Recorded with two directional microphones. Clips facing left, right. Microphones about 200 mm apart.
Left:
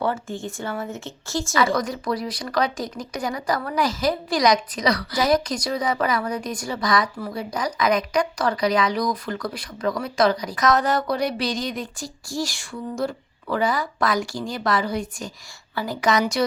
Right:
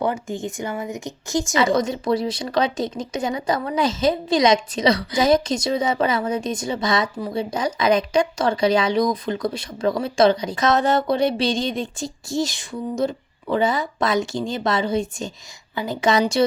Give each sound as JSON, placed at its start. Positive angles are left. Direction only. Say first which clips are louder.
{"t": 0.0, "sound": "a woman's voice", "louder": "right 2 dB", "side_deg": -15}